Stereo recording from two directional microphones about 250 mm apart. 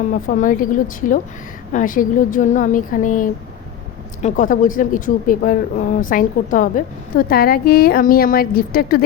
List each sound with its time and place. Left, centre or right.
0.3 s speech: left